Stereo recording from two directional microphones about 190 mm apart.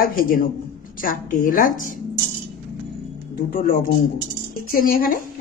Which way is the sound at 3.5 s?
50° left (ahead or behind).